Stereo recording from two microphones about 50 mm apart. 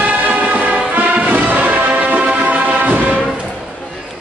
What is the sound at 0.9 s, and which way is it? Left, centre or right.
Music, right.